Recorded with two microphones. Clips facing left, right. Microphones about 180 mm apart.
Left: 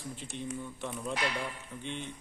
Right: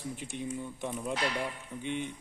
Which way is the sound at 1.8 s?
10° right (ahead or behind).